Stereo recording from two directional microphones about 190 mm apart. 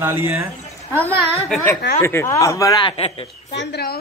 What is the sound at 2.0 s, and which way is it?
Speech, 15° left (ahead or behind).